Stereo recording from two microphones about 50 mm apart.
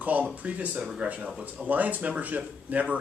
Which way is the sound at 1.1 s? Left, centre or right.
Right.